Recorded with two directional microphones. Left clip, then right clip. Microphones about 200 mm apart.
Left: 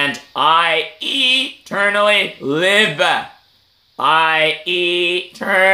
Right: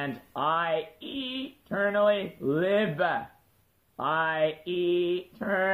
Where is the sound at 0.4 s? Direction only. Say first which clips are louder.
Left 13 dB; 40° left (ahead or behind).